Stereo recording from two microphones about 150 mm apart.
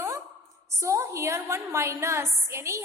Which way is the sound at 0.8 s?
20° right (ahead or behind).